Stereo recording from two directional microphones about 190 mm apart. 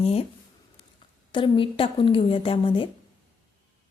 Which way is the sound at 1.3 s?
25° left (ahead or behind).